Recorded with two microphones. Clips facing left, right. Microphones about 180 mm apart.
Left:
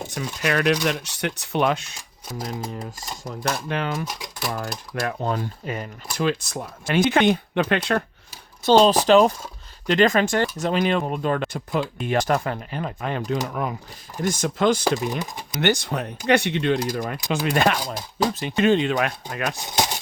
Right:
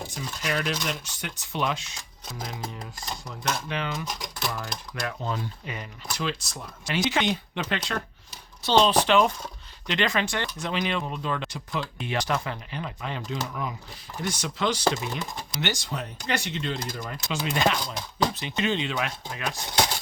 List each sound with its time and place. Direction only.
0.1 s speech: 70° left (ahead or behind)
2.4 s speech: 35° left (ahead or behind)
4.0 s speech: 5° left (ahead or behind)
4.5 s speech: 50° left (ahead or behind)
8.6 s speech: 45° left (ahead or behind); by 19.5 s 60° left (ahead or behind)